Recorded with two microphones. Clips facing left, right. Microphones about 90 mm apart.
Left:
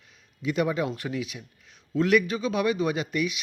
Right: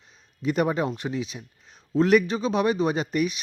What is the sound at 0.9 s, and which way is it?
Speech, 25° right (ahead or behind).